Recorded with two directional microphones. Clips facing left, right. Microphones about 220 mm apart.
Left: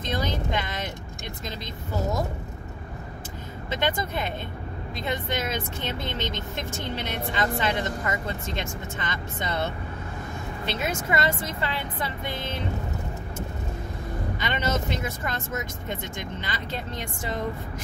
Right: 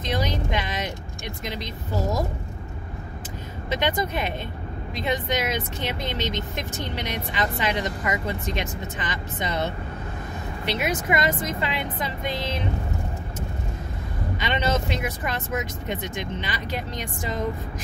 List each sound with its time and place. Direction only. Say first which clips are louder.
0.0 s vehicle: right 2 dB; 20° right (ahead or behind)
1.4 s speech: right 4 dB; 15° right (ahead or behind)
3.7 s speech: right 2 dB; 15° right (ahead or behind)
14.4 s speech: right 3 dB; 20° right (ahead or behind)